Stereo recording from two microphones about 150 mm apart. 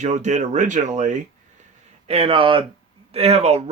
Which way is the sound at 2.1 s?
40° right (ahead or behind).